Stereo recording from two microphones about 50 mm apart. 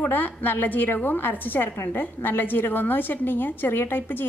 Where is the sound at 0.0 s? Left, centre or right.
Left.